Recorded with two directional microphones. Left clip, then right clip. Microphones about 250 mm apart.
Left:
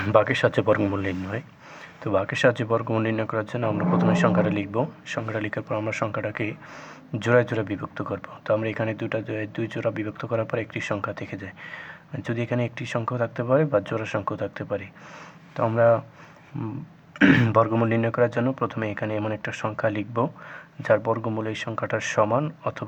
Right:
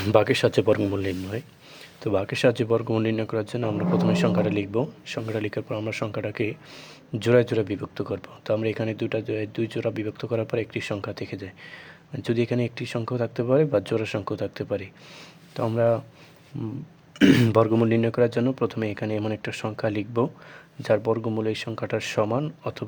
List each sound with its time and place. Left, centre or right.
0.0 s speech: right
17.2 s speech: right